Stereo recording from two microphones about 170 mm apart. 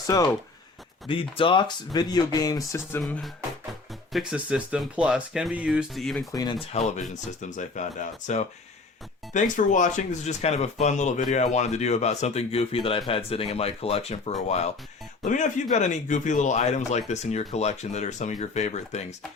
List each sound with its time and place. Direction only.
1.0 s speech: 30° left (ahead or behind)
3.0 s speech: centre (ahead or behind)
6.3 s speech: 25° left (ahead or behind)
6.7 s speech: 40° left (ahead or behind)